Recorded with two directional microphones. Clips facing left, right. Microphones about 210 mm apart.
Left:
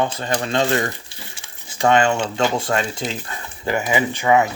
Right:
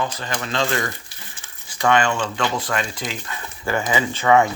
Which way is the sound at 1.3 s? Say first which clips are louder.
Left 3 dB; 25° left (ahead or behind).